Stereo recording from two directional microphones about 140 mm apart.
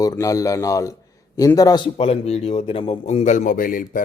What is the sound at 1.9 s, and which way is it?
Speech, 45° left (ahead or behind).